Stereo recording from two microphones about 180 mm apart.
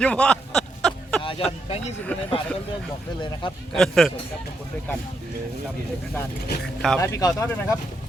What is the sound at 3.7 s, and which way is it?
Speech, centre (ahead or behind).